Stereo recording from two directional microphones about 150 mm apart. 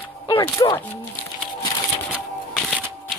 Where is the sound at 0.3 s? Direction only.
30° left (ahead or behind).